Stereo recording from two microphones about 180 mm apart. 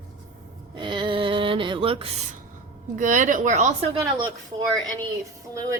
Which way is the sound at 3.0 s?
45° right (ahead or behind).